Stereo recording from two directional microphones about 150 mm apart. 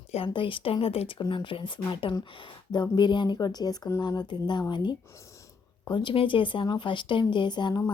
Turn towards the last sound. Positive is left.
turn(degrees=30)  # may be behind; listen again after turning